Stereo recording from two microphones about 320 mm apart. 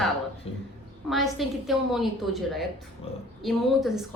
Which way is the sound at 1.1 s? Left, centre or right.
Centre.